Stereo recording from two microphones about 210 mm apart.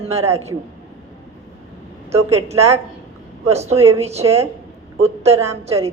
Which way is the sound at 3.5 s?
30° right (ahead or behind).